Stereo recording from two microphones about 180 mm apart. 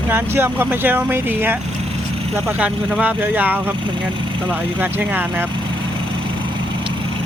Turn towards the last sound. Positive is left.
turn(degrees=-10)  # may be behind; listen again after turning